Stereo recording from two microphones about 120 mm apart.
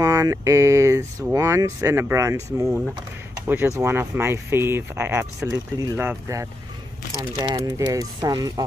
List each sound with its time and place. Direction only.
0.0 s speech: 30° right (ahead or behind)
3.4 s speech: 15° right (ahead or behind); by 8.6 s 30° right (ahead or behind)